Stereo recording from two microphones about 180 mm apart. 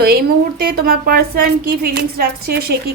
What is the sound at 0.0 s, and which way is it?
A woman's voice, 60° right (ahead or behind).